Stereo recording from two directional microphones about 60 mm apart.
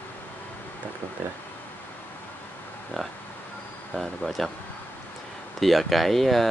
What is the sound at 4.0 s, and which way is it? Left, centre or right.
Speech, centre.